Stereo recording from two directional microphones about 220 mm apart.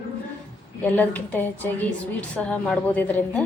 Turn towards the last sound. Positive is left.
turn(degrees=10)  # may be behind; listen again after turning